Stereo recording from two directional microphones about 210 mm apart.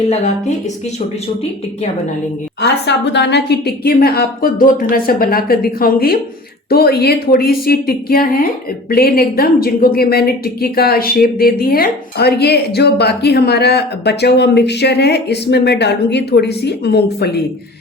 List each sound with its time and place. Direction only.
2.6 s a woman's voice: 55° left (ahead or behind)